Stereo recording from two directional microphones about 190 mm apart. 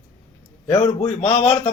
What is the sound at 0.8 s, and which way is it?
Speech, 35° left (ahead or behind).